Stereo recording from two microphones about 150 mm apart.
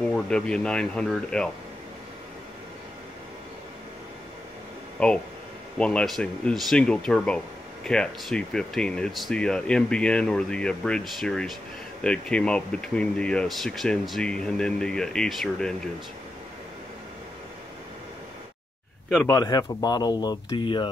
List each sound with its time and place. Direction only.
0.1 s speech: 5° left (ahead or behind)
4.9 s speech: 5° left (ahead or behind)
19.2 s speech: 20° left (ahead or behind)